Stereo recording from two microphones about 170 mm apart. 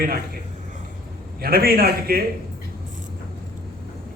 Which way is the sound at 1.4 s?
60° right (ahead or behind).